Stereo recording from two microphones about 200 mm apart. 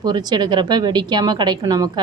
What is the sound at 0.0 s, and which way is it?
A woman's voice, 20° right (ahead or behind).